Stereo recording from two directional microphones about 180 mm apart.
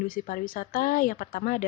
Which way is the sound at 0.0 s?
50° left (ahead or behind).